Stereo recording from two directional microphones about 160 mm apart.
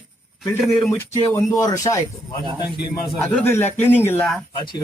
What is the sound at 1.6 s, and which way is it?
Speech, 20° left (ahead or behind).